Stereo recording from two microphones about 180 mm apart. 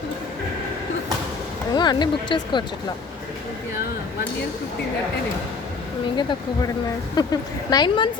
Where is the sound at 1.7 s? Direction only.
25° left (ahead or behind).